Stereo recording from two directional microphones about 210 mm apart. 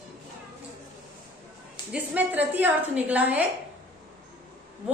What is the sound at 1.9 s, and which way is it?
A woman's voice, 5° right (ahead or behind).